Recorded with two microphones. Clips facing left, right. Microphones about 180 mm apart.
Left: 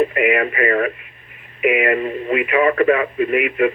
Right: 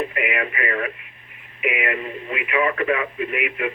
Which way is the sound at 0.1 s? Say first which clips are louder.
Left 8 dB; 45° left (ahead or behind).